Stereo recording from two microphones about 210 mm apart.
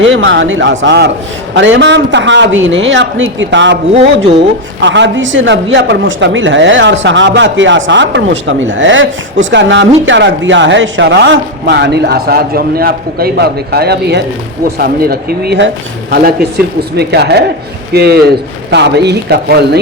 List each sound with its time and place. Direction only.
0.0 s speech: 60° right (ahead or behind)
17.0 s speech: 50° right (ahead or behind)